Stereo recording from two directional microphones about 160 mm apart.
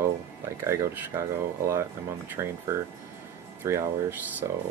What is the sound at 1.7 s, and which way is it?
Speech, 15° right (ahead or behind).